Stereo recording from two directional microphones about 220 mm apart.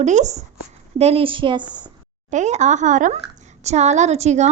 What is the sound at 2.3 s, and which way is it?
A woman's voice, 30° right (ahead or behind).